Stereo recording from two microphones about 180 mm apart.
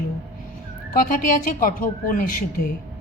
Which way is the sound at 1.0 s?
50° left (ahead or behind).